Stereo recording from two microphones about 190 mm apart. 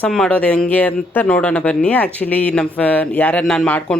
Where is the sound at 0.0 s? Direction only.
5° left (ahead or behind).